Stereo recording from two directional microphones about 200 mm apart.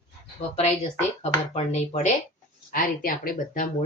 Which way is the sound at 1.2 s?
35° left (ahead or behind).